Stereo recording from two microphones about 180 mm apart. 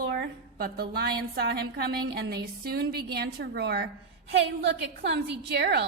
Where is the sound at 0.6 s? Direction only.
60° right (ahead or behind).